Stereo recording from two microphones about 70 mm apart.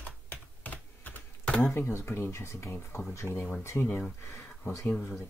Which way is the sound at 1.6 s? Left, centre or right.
Left.